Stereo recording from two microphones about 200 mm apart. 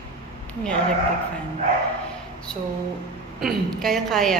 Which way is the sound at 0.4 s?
5° left (ahead or behind).